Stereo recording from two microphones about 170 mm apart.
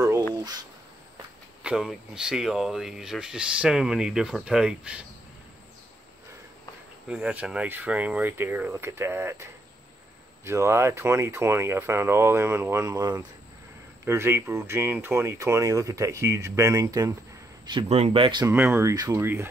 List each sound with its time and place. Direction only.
1.6 s speech: 5° right (ahead or behind)
7.1 s speech: 5° right (ahead or behind)
17.8 s speech: 40° right (ahead or behind)
18.5 s speech: 10° right (ahead or behind)